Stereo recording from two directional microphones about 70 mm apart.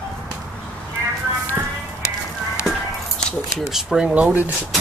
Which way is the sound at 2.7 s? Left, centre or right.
Centre.